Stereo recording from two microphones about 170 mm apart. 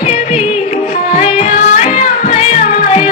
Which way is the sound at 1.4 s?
40° left (ahead or behind).